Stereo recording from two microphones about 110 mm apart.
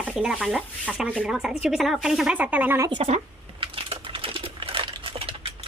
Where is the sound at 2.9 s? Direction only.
60° right (ahead or behind).